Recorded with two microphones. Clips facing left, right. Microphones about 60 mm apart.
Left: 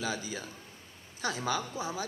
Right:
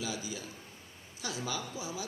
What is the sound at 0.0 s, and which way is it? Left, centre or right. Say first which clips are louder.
A man's voice: left 3 dB; left.